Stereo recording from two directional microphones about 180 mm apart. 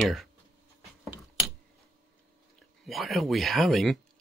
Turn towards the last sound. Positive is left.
turn(degrees=0)  # may be behind; listen again after turning